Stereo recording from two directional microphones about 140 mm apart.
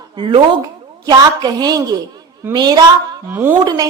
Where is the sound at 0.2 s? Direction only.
35° right (ahead or behind).